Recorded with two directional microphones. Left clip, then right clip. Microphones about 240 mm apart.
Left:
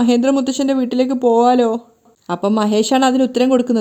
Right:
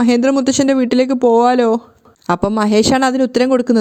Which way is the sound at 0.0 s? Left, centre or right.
Right.